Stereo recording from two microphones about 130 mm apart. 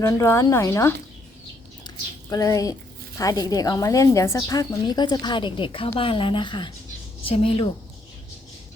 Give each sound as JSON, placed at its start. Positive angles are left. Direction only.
{"t": 0.0, "sound": "speech", "side_deg": 25}
{"t": 2.3, "sound": "a woman's voice", "side_deg": 25}